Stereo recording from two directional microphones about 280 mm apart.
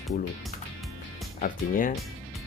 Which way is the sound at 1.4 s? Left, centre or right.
Left.